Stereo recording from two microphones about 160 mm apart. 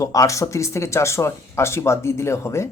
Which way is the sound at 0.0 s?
20° left (ahead or behind).